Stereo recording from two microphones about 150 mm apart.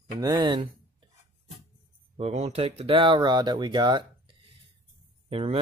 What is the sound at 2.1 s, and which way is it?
Speech, 45° right (ahead or behind).